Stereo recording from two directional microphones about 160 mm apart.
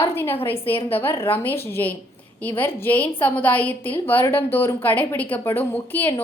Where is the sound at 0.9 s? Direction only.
15° left (ahead or behind).